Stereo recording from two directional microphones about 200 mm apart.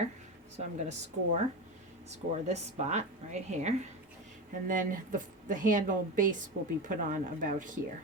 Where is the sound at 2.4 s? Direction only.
35° right (ahead or behind).